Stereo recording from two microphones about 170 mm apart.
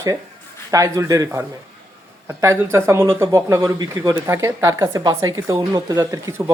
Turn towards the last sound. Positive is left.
turn(degrees=-15)  # may be behind; listen again after turning